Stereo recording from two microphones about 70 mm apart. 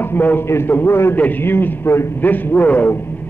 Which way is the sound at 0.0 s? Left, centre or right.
Left.